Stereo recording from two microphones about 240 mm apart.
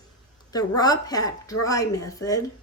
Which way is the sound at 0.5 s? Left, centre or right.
Centre.